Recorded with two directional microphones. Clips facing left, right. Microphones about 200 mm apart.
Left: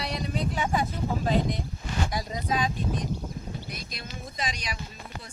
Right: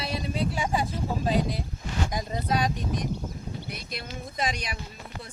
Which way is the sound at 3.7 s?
60° right (ahead or behind).